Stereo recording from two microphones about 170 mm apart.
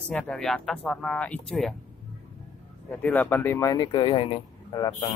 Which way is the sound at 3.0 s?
10° left (ahead or behind).